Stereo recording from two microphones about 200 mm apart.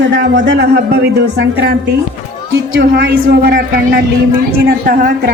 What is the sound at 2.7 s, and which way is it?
Speech, 55° right (ahead or behind).